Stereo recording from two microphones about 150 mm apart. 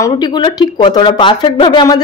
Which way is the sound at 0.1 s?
30° left (ahead or behind).